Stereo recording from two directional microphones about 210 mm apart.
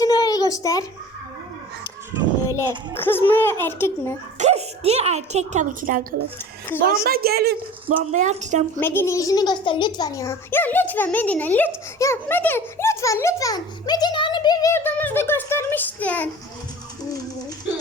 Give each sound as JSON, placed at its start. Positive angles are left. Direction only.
{"t": 0.0, "sound": "a sound", "side_deg": 15}
{"t": 2.6, "sound": "a child's voice", "side_deg": 10}
{"t": 4.4, "sound": "a woman's voice", "side_deg": -30}
{"t": 8.1, "sound": "speech", "side_deg": -35}
{"t": 8.8, "sound": "a child's voice", "side_deg": 10}